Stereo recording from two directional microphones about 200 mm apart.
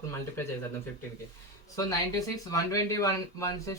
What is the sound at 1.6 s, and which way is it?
Speech, 15° left (ahead or behind).